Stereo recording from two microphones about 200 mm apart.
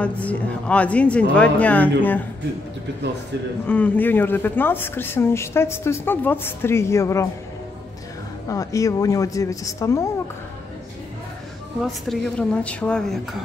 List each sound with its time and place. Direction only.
0.0 s speech: 5° left (ahead or behind)
3.6 s speech: 10° left (ahead or behind)
8.5 s speech: 15° left (ahead or behind)
11.8 s speech: centre (ahead or behind)